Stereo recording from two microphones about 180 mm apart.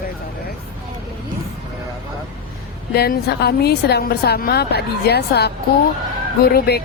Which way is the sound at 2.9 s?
60° left (ahead or behind).